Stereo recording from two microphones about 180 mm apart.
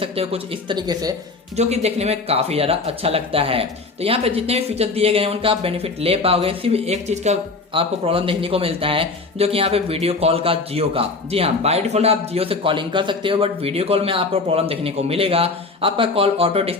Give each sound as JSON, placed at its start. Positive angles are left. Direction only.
{"t": 0.0, "sound": "speech", "side_deg": -35}
{"t": 1.5, "sound": "speech", "side_deg": -35}